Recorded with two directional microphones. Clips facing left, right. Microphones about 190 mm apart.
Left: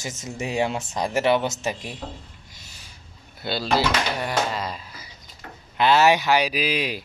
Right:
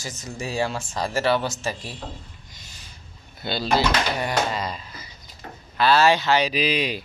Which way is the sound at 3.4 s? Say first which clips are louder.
Even; 5° left (ahead or behind).